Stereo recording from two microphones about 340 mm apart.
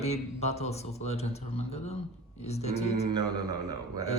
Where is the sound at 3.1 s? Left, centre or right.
Centre.